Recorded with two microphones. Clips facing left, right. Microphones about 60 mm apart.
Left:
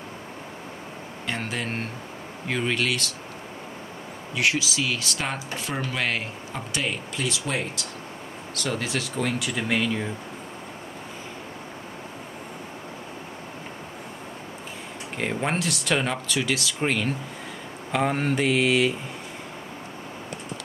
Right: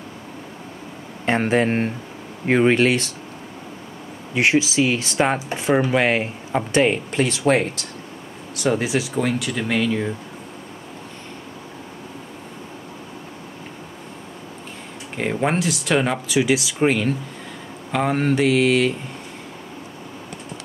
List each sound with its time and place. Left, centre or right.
1.2 s speech: right
4.4 s speech: right
8.5 s speech: centre
15.1 s speech: centre